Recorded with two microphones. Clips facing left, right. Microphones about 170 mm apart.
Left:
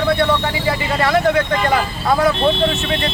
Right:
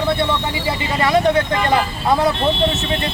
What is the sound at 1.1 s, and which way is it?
Speech, 20° right (ahead or behind).